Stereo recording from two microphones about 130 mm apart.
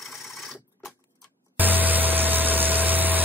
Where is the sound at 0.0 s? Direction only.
Centre (ahead or behind).